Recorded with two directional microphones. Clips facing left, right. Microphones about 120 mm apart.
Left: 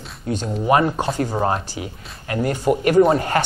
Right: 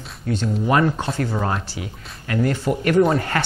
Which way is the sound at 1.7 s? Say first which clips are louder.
Left 2 dB; 25° left (ahead or behind).